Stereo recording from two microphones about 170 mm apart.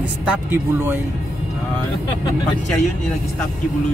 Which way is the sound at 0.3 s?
15° right (ahead or behind).